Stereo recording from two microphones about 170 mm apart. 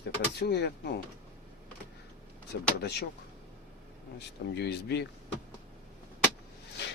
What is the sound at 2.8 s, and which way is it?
Speech, 75° left (ahead or behind).